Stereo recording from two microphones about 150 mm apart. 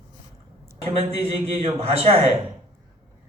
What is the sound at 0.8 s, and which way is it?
Speech, 40° right (ahead or behind).